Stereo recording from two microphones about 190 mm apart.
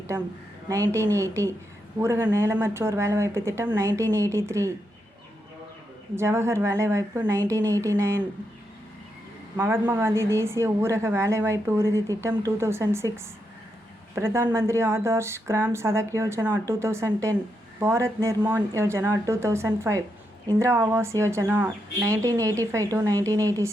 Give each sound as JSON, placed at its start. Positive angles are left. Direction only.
{"t": 0.7, "sound": "a woman's voice", "side_deg": -15}
{"t": 6.1, "sound": "a woman's voice", "side_deg": -15}
{"t": 9.6, "sound": "a woman's voice", "side_deg": -10}
{"t": 14.2, "sound": "a woman's voice", "side_deg": -15}